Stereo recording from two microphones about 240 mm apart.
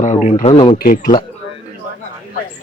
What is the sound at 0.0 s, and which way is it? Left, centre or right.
Speech, left.